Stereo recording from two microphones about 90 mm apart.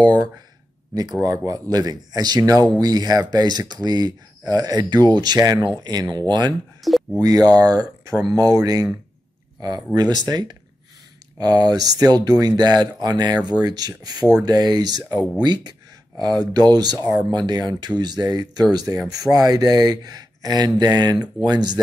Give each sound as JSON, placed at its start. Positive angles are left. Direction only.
{"t": 0.0, "sound": "speech", "side_deg": -45}
{"t": 6.8, "sound": "a sound", "side_deg": 0}
{"t": 7.2, "sound": "speech", "side_deg": -45}